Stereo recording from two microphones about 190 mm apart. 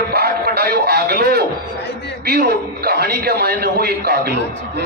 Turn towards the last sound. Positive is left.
turn(degrees=-55)  # may be behind; listen again after turning